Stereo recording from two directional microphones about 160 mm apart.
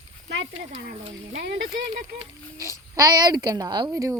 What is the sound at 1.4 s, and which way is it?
Speech, 90° right.